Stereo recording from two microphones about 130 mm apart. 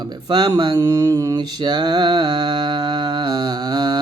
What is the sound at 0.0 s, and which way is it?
Speech, 35° right (ahead or behind).